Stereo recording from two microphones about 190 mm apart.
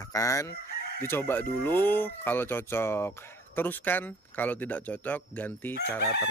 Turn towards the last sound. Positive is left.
turn(degrees=10)  # may be behind; listen again after turning